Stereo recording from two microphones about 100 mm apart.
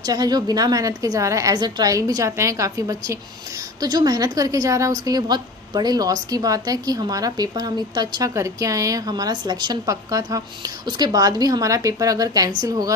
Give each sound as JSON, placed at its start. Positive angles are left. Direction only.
{"t": 0.0, "sound": "a woman's voice", "side_deg": -40}